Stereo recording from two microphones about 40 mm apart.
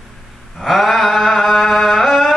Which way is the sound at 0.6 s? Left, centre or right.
Centre.